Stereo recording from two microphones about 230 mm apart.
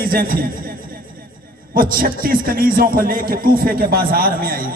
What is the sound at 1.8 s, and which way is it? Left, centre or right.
A man's voice, right.